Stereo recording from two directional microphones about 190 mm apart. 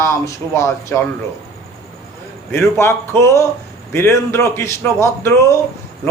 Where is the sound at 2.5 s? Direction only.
15° left (ahead or behind).